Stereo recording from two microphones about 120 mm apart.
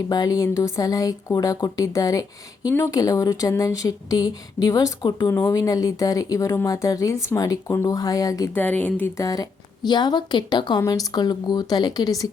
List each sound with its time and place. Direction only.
0.1 s speech: 30° left (ahead or behind)
8.5 s speech: 15° left (ahead or behind)
9.1 s a woman's voice: 30° left (ahead or behind)